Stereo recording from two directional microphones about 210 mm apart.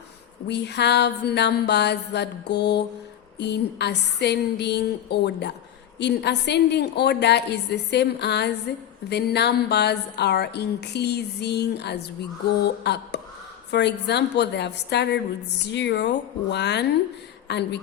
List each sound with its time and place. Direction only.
0.4 s a woman's voice: 55° left (ahead or behind)